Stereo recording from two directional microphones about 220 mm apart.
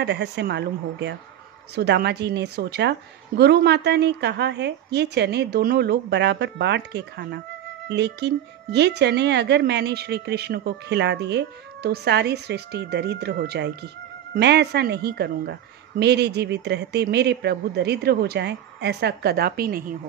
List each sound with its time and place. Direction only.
0.0 s speech: 50° right (ahead or behind)